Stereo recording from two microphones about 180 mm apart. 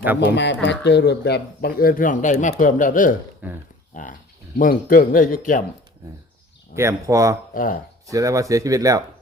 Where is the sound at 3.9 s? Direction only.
45° left (ahead or behind).